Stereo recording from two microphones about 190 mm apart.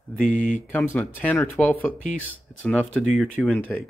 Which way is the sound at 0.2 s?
45° left (ahead or behind).